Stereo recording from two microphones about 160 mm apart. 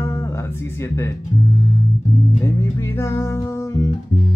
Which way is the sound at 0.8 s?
15° left (ahead or behind).